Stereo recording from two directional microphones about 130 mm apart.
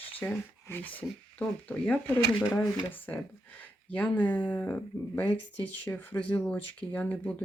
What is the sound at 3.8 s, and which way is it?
Speech, 10° left (ahead or behind).